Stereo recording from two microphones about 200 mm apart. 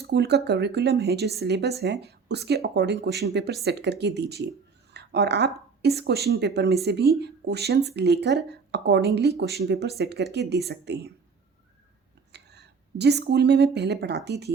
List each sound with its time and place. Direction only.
0.0 s speech: 55° right (ahead or behind)
12.3 s speech: 55° right (ahead or behind)